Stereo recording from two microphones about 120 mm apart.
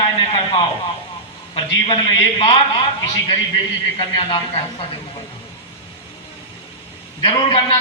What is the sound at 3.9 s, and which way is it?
Speech, 50° left (ahead or behind).